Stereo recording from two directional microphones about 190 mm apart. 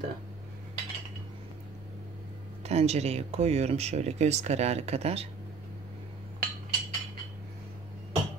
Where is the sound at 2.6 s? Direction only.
35° right (ahead or behind).